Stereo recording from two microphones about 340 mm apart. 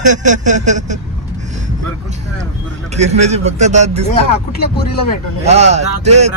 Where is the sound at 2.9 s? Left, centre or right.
Centre.